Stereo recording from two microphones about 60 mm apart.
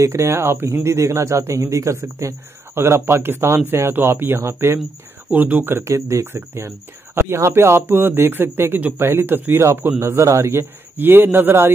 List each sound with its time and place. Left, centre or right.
0.0 s speech: right
3.9 s a man's voice: right
5.3 s a man's voice: right